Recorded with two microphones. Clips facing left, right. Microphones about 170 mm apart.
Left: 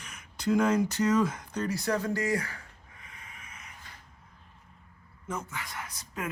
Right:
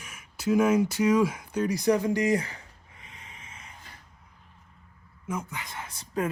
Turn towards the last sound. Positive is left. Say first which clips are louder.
# right 7 dB
turn(degrees=-30)  # may be behind; listen again after turning